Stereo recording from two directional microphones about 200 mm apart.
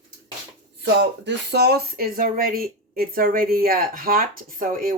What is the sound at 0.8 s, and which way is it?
Speech, 60° right (ahead or behind).